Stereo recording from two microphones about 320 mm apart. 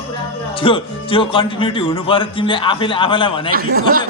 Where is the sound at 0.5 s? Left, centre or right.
Centre.